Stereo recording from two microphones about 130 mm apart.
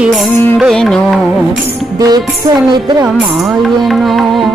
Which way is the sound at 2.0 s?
30° right (ahead or behind).